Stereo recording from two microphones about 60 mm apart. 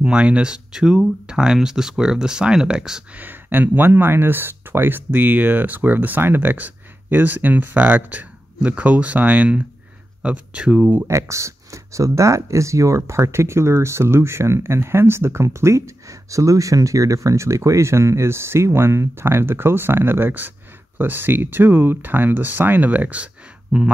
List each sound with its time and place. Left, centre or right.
0.0 s speech: centre
3.2 s speech: right
11.1 s speech: right; by 23.9 s centre